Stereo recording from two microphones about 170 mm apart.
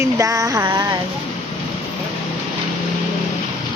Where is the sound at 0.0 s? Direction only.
20° right (ahead or behind).